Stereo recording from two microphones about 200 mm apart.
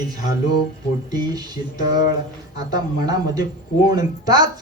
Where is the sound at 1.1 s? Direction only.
20° right (ahead or behind).